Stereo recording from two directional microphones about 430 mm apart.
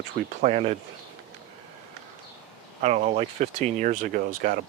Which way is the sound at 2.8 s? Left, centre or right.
Centre.